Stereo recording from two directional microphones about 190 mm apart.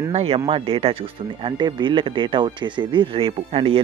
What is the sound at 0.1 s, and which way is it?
Speech, 30° right (ahead or behind).